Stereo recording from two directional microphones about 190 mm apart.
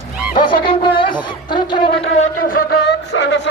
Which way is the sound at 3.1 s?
65° left (ahead or behind).